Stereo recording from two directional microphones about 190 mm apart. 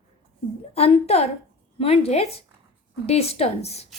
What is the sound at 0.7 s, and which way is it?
A woman's voice, 30° left (ahead or behind).